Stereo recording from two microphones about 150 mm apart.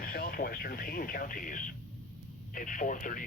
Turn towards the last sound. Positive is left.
turn(degrees=60)  # may be behind; listen again after turning